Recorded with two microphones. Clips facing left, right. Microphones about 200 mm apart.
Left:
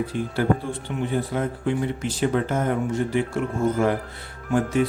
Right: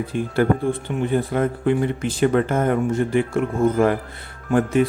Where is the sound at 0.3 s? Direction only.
55° right (ahead or behind).